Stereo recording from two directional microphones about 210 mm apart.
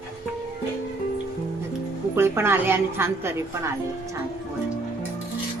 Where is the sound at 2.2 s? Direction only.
10° right (ahead or behind).